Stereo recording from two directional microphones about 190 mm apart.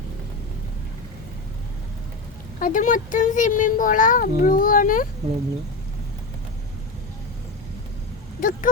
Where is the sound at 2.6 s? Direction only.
45° left (ahead or behind).